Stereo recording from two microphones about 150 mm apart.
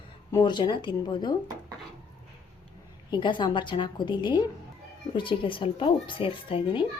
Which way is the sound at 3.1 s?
30° left (ahead or behind).